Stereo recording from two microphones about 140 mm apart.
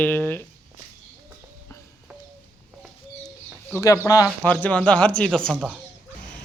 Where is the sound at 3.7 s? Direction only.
25° left (ahead or behind).